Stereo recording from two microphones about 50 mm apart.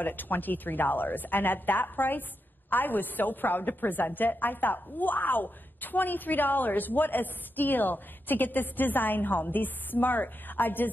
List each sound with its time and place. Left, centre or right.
0.0 s a woman's voice: left